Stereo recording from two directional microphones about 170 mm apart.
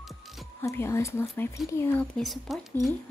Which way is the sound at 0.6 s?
15° left (ahead or behind).